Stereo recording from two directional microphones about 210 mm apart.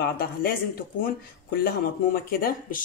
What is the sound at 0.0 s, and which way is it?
Speech, 45° left (ahead or behind).